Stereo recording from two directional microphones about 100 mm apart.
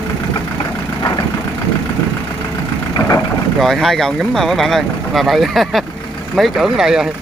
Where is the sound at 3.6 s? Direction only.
5° left (ahead or behind).